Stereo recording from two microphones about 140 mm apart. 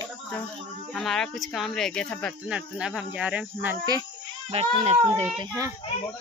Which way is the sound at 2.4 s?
5° right (ahead or behind).